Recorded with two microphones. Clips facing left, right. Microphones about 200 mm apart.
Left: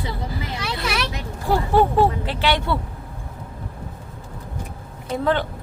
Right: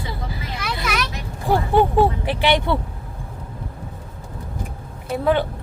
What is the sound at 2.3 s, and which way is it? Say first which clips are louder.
Speech: right 3 dB; 15° right (ahead or behind).